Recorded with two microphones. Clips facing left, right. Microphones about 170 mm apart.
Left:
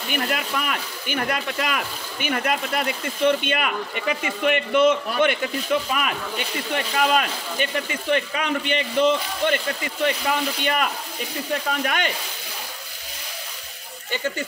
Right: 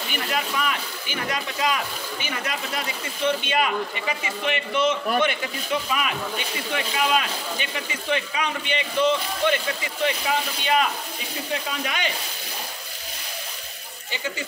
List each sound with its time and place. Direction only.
0.1 s speech: 50° left (ahead or behind)